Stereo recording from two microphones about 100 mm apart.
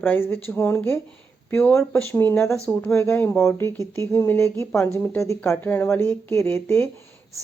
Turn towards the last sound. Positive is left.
turn(degrees=25)  # may be behind; listen again after turning